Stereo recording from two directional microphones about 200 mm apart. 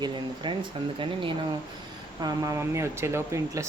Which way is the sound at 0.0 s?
25° right (ahead or behind).